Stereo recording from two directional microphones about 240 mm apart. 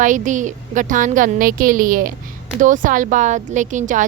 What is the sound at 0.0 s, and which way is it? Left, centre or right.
A woman's voice, right.